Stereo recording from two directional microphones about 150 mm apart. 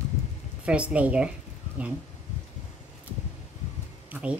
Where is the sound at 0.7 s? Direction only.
10° right (ahead or behind).